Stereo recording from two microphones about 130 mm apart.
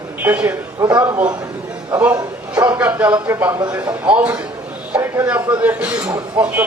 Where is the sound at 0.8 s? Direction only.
25° right (ahead or behind).